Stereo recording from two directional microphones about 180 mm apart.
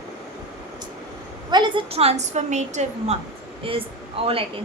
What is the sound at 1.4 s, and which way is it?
A woman's voice, 25° right (ahead or behind).